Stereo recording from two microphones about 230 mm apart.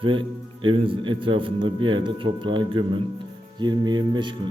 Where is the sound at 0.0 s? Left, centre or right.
Right.